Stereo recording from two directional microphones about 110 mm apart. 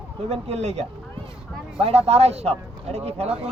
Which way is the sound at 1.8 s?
65° right (ahead or behind).